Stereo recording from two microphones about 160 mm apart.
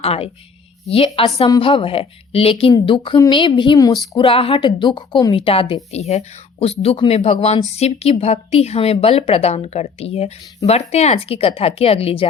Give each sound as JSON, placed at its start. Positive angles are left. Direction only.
{"t": 0.0, "sound": "a woman's voice", "side_deg": 40}